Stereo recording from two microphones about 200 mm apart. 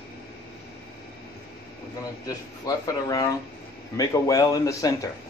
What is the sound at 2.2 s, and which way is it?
Speech, 20° left (ahead or behind).